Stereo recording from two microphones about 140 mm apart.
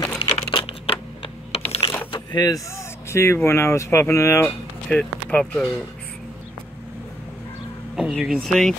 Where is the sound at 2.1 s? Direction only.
30° left (ahead or behind).